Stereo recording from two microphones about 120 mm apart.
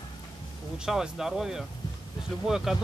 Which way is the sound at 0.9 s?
5° right (ahead or behind).